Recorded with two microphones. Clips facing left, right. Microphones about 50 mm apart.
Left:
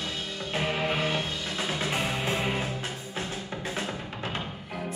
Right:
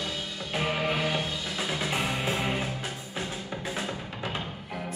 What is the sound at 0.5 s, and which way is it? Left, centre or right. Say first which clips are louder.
Music: even; centre.